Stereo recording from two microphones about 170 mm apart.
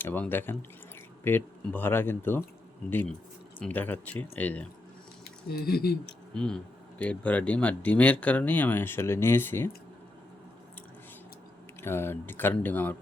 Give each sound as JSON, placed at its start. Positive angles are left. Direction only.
{"t": 0.0, "sound": "speech", "side_deg": 10}
{"t": 5.5, "sound": "speech", "side_deg": 65}
{"t": 6.1, "sound": "speech", "side_deg": 5}
{"t": 11.8, "sound": "speech", "side_deg": 15}